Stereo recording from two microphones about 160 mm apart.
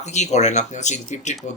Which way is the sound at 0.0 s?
45° left (ahead or behind).